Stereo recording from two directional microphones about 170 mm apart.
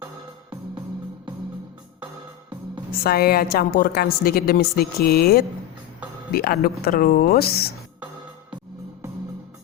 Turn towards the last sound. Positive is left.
turn(degrees=65)  # may be behind; listen again after turning